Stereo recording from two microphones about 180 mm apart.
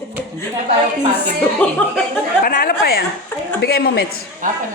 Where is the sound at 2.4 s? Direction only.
55° left (ahead or behind).